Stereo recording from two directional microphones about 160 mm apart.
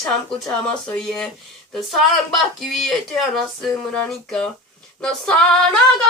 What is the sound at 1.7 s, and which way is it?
Speech, centre (ahead or behind).